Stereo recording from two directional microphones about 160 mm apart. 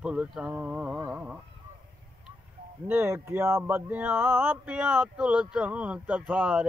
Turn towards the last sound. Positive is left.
turn(degrees=-10)  # may be behind; listen again after turning